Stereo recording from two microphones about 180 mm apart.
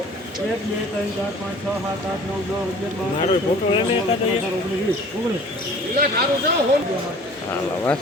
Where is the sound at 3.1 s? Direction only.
30° left (ahead or behind).